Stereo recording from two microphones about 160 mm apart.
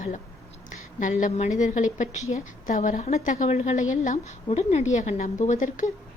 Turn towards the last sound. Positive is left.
turn(degrees=50)  # may be behind; listen again after turning